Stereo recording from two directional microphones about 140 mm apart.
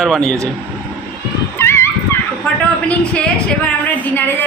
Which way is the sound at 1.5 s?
20° left (ahead or behind).